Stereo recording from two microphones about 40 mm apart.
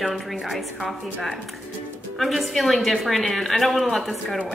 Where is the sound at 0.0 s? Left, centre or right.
Centre.